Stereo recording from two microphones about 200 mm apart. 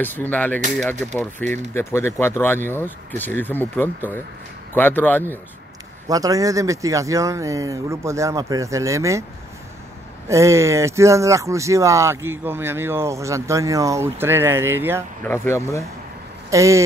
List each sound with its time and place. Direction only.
0.0 s speech: 10° left (ahead or behind)
6.0 s speech: 15° right (ahead or behind)
10.2 s speech: 15° right (ahead or behind)
15.2 s speech: 10° left (ahead or behind)
16.4 s speech: 15° right (ahead or behind)